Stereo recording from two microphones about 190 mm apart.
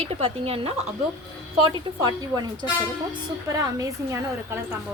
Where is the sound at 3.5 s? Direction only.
15° right (ahead or behind).